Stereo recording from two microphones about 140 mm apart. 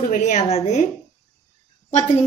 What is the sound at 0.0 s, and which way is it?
Speech, 60° left (ahead or behind).